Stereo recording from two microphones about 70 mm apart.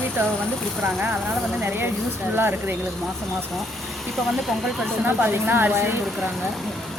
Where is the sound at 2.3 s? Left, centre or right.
Right.